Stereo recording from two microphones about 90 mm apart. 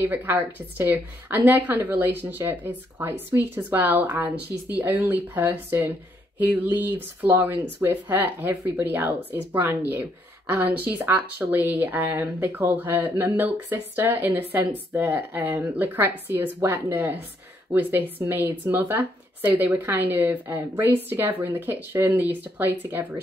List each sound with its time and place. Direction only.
0.0 s speech: 20° right (ahead or behind)
18.2 s speech: 25° right (ahead or behind)